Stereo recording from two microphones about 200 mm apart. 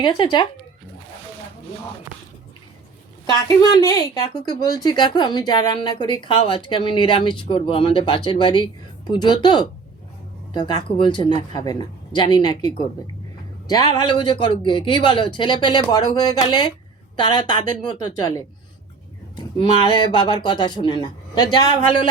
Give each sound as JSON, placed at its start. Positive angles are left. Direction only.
{"t": 0.0, "sound": "speech", "side_deg": 20}
{"t": 3.8, "sound": "speech", "side_deg": 15}
{"t": 19.5, "sound": "speech", "side_deg": 25}